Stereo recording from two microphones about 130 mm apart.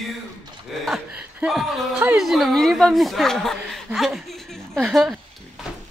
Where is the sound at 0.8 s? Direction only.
5° right (ahead or behind).